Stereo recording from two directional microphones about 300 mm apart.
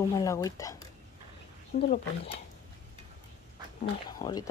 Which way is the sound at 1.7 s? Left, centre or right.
Left.